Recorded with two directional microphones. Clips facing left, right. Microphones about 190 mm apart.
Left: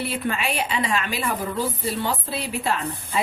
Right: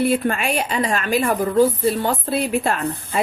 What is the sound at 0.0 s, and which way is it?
A woman's voice, 50° right (ahead or behind).